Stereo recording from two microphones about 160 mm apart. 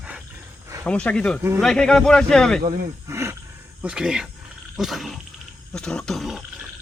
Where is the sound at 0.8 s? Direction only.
10° left (ahead or behind).